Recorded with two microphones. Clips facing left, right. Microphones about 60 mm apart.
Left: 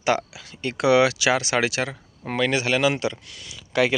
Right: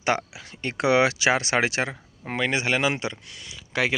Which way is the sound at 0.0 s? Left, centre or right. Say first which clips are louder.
Left 2 dB; right.